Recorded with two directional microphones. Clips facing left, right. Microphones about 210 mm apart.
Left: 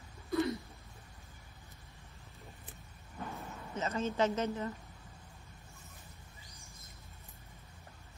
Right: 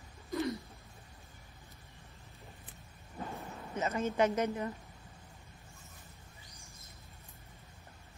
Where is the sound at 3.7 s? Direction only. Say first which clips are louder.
Right 2 dB; 15° right (ahead or behind).